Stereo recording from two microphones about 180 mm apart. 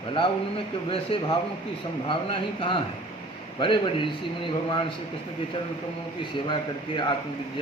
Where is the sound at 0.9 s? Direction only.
30° left (ahead or behind).